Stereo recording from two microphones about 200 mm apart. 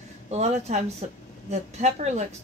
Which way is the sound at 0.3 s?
35° right (ahead or behind).